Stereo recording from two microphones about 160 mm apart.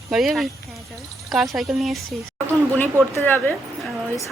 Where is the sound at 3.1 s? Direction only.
10° left (ahead or behind).